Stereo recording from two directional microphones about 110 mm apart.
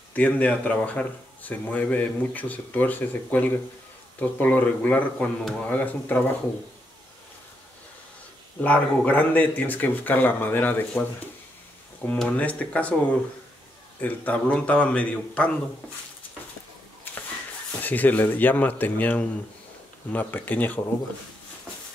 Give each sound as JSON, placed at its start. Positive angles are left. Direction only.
{"t": 0.1, "sound": "speech", "side_deg": 15}
{"t": 8.5, "sound": "speech", "side_deg": 15}
{"t": 12.1, "sound": "speech", "side_deg": 15}
{"t": 17.7, "sound": "speech", "side_deg": 15}